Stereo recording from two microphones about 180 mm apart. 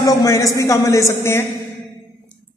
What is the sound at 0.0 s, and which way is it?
A woman's voice, 20° left (ahead or behind).